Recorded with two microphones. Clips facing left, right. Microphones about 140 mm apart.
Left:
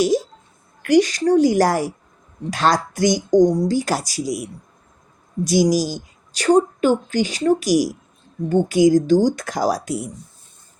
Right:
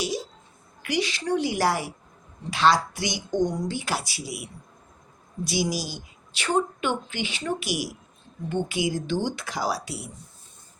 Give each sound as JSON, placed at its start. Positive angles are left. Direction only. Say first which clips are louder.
{"t": 0.9, "sound": "a woman's voice", "louder": "left 11 dB", "side_deg": 45}
{"t": 5.5, "sound": "a woman's voice", "louder": "left 11 dB", "side_deg": 45}